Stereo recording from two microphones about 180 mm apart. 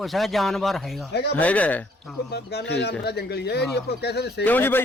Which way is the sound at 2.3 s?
65° left (ahead or behind).